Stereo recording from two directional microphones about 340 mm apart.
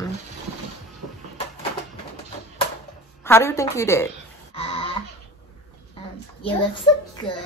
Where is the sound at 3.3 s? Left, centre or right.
Centre.